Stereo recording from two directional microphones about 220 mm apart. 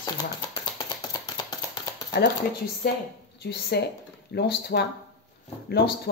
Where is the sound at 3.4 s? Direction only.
45° left (ahead or behind).